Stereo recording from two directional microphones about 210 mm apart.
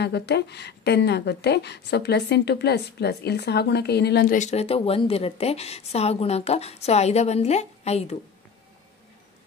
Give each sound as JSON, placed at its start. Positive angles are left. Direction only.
{"t": 0.0, "sound": "a woman's voice", "side_deg": 55}
{"t": 4.4, "sound": "a woman's voice", "side_deg": 30}